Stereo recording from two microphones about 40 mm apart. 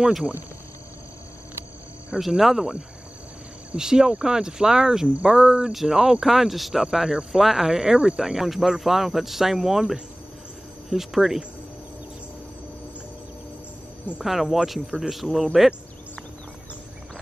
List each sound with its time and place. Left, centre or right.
2.1 s speech: centre
3.7 s speech: centre
5.0 s speech: right
5.3 s speech: right
14.2 s speech: centre